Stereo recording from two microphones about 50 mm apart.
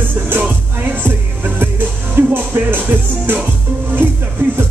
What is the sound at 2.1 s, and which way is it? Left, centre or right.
Speech, right.